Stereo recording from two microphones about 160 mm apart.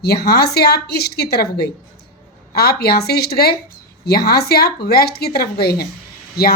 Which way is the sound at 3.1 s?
80° left.